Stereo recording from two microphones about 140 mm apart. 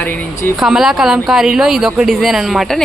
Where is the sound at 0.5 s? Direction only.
5° right (ahead or behind).